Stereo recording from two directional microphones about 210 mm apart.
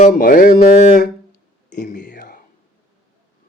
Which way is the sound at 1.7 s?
50° left (ahead or behind).